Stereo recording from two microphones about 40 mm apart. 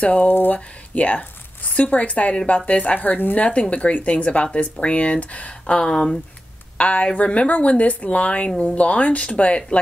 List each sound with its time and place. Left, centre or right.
0.0 s speech: left
3.3 s speech: left